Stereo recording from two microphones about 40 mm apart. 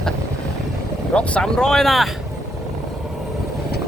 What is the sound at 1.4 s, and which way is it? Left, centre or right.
Speech, centre.